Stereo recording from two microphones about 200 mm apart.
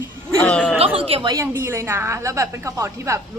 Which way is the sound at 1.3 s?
15° right (ahead or behind).